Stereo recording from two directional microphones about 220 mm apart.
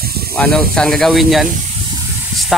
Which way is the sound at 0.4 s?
5° left (ahead or behind).